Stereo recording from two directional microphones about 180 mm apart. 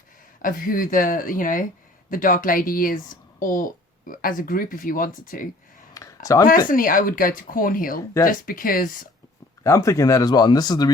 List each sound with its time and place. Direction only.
0.4 s speech: 50° left (ahead or behind)
5.9 s a sound: 20° left (ahead or behind)
6.7 s speech: 50° left (ahead or behind)
7.9 s speech: 20° left (ahead or behind)
8.3 s speech: 50° left (ahead or behind)
9.6 s speech: 15° left (ahead or behind)